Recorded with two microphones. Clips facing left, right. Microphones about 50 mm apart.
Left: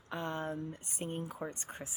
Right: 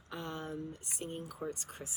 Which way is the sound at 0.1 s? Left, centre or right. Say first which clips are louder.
Left 4 dB; left.